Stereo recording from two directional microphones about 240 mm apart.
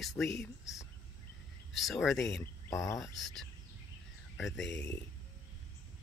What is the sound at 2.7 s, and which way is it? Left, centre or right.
Cricket, centre.